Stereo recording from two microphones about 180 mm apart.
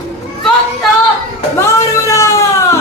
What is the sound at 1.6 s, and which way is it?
Speech, 15° left (ahead or behind).